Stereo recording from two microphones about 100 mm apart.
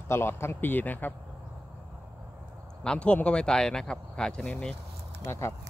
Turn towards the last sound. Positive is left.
turn(degrees=25)  # may be behind; listen again after turning